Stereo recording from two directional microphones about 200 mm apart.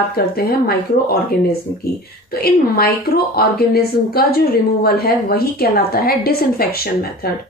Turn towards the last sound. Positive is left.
turn(degrees=50)  # may be behind; listen again after turning